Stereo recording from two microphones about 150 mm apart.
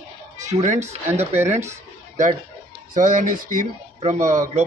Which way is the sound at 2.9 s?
55° right (ahead or behind).